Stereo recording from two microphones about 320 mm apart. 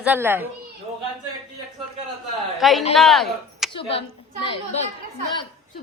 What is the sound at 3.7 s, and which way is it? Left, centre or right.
A woman's voice, centre.